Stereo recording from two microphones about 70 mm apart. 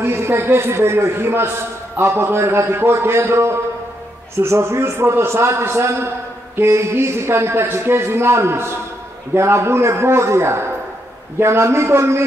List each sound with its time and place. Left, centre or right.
0.0 s a man's voice: right